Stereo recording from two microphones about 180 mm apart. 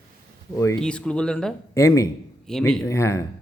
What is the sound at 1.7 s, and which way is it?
Speech, 15° left (ahead or behind).